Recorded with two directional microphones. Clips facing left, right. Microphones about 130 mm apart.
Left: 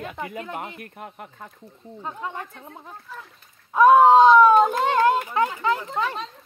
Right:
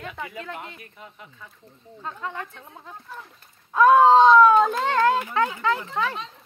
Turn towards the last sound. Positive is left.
turn(degrees=15)  # may be behind; listen again after turning